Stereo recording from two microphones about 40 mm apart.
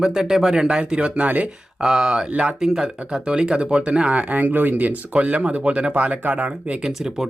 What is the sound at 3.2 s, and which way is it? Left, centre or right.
Speech, right.